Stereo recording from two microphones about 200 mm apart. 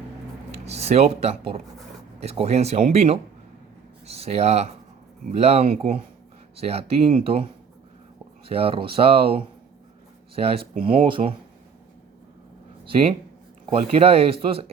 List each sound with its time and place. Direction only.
0.5 s speech: 30° right (ahead or behind)
8.4 s speech: 30° right (ahead or behind)
12.8 s speech: 30° right (ahead or behind)